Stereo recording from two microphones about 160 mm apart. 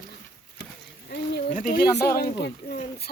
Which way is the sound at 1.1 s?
90° left.